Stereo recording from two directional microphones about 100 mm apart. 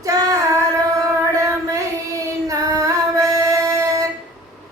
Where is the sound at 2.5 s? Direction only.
35° right (ahead or behind).